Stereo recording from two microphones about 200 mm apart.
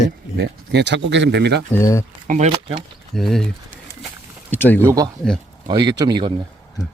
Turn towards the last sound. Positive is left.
turn(degrees=-20)  # may be behind; listen again after turning